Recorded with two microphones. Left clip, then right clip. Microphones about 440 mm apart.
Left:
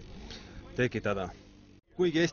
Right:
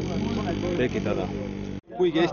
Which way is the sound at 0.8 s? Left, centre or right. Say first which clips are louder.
Even; left.